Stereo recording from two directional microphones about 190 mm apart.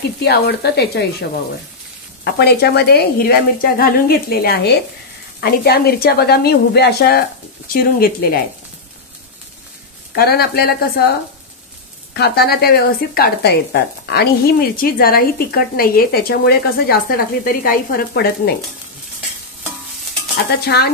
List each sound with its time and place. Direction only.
0.2 s a woman's voice: 60° left (ahead or behind)
2.2 s a woman's voice: 60° left (ahead or behind)
10.1 s a woman's voice: 55° left (ahead or behind)
12.1 s speech: 60° left (ahead or behind)
20.6 s a woman's voice: 60° left (ahead or behind)